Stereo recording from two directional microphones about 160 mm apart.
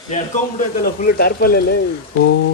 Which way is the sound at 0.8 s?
70° left (ahead or behind).